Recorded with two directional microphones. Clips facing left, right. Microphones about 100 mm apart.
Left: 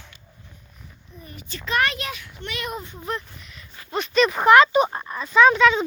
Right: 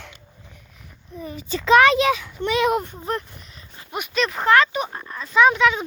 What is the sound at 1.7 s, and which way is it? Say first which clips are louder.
Speech: right 10 dB; 90° right.